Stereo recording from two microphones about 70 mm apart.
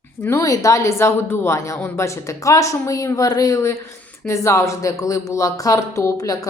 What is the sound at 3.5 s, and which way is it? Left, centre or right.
Speech, left.